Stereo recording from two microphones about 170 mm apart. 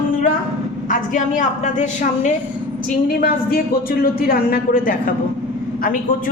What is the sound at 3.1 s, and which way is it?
Speech, 60° left (ahead or behind).